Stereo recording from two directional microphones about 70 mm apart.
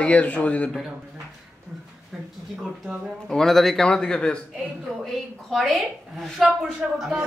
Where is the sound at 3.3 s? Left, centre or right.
Centre.